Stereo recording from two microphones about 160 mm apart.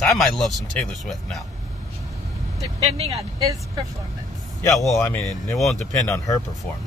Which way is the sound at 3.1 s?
20° right (ahead or behind).